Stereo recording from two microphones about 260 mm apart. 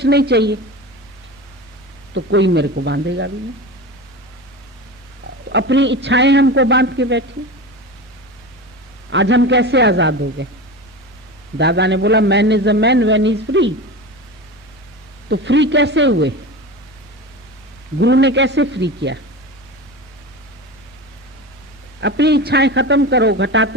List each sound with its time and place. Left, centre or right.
0.0 s a woman's voice: right
2.1 s a man's voice: right
5.5 s a man's voice: right
9.0 s a man's voice: right
11.5 s a man's voice: right
15.3 s a man's voice: right
17.9 s a man's voice: right
22.0 s a man's voice: right